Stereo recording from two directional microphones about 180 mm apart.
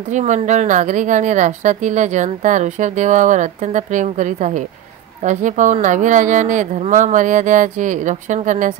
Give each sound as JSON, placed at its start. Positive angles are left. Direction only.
{"t": 0.1, "sound": "a woman's voice", "side_deg": -40}